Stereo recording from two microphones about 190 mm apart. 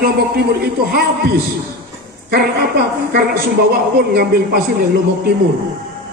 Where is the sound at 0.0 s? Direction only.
55° right (ahead or behind).